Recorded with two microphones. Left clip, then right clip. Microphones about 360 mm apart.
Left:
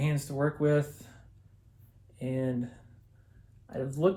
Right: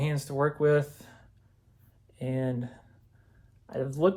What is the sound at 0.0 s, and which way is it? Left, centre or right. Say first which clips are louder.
Speech: right 3 dB; right.